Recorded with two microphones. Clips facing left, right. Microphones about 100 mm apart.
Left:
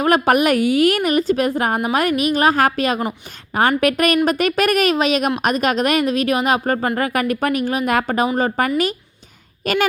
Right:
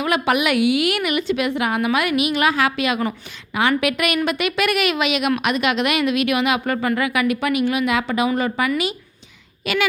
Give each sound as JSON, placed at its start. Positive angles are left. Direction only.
{"t": 0.0, "sound": "a woman's voice", "side_deg": 45}